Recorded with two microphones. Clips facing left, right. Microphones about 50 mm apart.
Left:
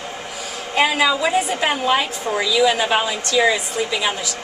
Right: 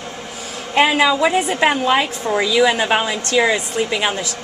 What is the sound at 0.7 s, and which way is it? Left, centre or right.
A woman's voice, right.